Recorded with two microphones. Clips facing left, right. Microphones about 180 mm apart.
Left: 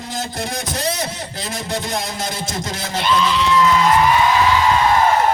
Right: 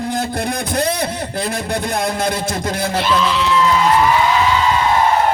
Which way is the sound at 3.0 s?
Centre (ahead or behind).